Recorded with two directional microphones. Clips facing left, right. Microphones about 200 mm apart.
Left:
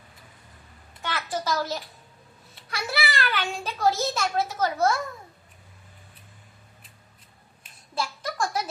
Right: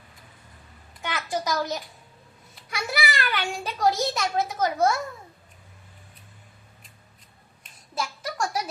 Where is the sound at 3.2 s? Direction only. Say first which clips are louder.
Even; 15° right (ahead or behind).